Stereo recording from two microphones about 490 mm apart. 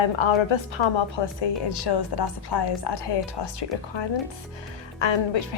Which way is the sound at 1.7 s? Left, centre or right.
Left.